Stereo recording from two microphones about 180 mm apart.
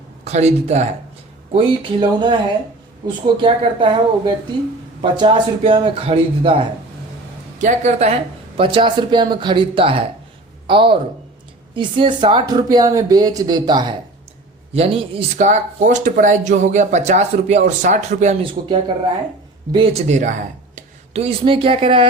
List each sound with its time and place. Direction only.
0.3 s speech: 40° right (ahead or behind)
1.5 s speech: 30° right (ahead or behind)
5.1 s speech: 25° right (ahead or behind); by 18.7 s 50° right (ahead or behind)
19.7 s speech: 30° right (ahead or behind)